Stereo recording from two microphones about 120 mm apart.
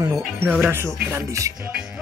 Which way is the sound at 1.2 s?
25° right (ahead or behind).